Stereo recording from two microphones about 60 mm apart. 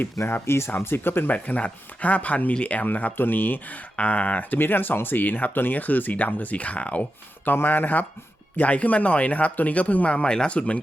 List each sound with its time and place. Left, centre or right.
0.4 s speech: left
1.3 s speech: left
3.9 s speech: left
7.4 s speech: left